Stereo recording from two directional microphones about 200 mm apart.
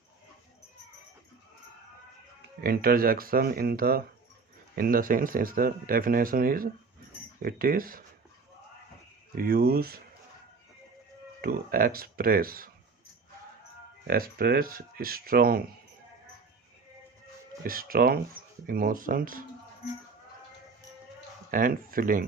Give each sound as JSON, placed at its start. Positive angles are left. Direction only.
{"t": 2.6, "sound": "speech", "side_deg": -50}
{"t": 9.3, "sound": "speech", "side_deg": -45}
{"t": 11.3, "sound": "speech", "side_deg": -50}
{"t": 14.1, "sound": "speech", "side_deg": -50}
{"t": 17.6, "sound": "speech", "side_deg": -45}
{"t": 21.5, "sound": "speech", "side_deg": -45}